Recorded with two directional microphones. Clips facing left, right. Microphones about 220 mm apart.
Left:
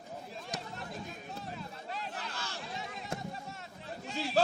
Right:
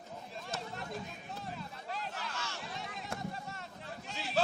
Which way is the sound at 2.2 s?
35° left (ahead or behind).